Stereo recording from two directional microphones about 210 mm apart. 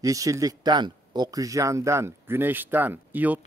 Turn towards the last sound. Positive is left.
turn(degrees=-10)  # may be behind; listen again after turning